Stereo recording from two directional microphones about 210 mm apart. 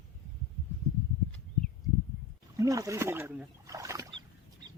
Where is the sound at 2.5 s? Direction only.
15° right (ahead or behind).